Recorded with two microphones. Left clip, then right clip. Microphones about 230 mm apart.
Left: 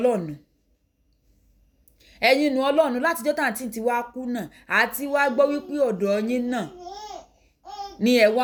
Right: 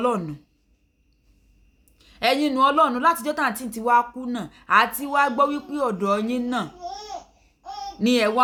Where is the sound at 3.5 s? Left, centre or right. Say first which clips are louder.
Right 3 dB; centre.